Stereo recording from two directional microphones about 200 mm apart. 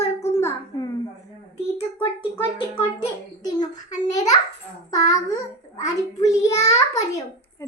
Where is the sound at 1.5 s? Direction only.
30° left (ahead or behind).